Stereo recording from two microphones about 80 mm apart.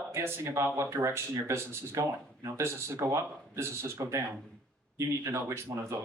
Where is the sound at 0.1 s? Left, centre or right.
Right.